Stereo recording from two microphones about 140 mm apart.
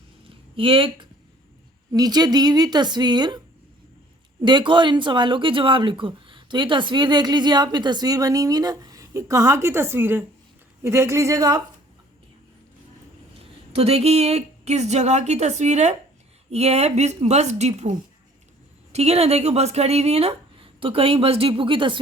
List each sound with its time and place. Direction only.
0.3 s a sound: 40° right (ahead or behind)
1.9 s speech: 25° right (ahead or behind)
13.4 s speech: 45° right (ahead or behind)
18.9 s speech: 50° right (ahead or behind)